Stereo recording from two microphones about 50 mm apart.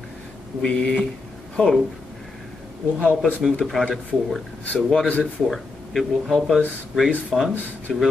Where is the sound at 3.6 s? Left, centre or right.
Centre.